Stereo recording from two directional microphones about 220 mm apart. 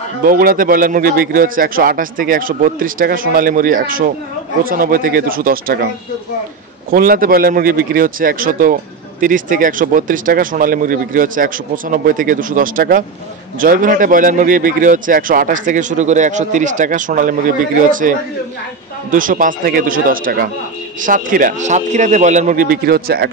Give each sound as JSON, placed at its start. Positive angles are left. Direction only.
{"t": 0.2, "sound": "a man's voice", "side_deg": -40}
{"t": 6.9, "sound": "a man's voice", "side_deg": -40}